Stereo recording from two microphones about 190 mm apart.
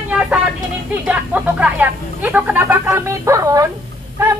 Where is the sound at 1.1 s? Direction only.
5° right (ahead or behind).